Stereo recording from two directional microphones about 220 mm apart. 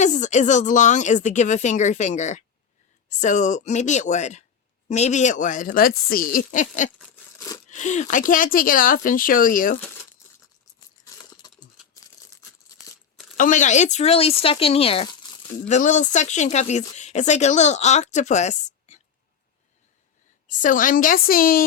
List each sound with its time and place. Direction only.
0.0 s speech: 35° left (ahead or behind)
7.3 s a sound: 15° left (ahead or behind)
7.7 s speech: 35° left (ahead or behind)
11.0 s a sound: 15° left (ahead or behind)
13.3 s speech: 35° left (ahead or behind)
20.5 s speech: 35° left (ahead or behind)